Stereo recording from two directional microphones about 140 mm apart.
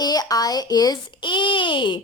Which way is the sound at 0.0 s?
25° left (ahead or behind).